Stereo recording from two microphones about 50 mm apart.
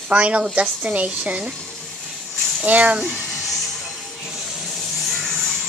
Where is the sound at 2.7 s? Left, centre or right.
Right.